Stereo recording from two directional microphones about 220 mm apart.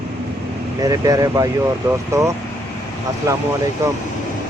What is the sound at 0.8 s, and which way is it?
Speech, 15° right (ahead or behind).